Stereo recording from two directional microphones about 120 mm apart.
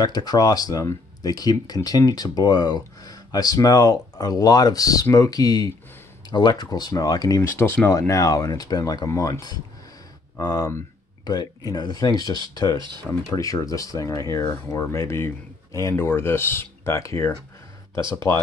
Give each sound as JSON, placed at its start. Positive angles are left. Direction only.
{"t": 0.0, "sound": "speech", "side_deg": 35}
{"t": 7.5, "sound": "speech", "side_deg": 20}
{"t": 12.7, "sound": "speech", "side_deg": -40}
{"t": 13.3, "sound": "speech", "side_deg": 30}